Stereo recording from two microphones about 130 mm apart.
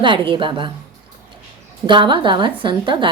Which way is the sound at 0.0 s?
40° right (ahead or behind).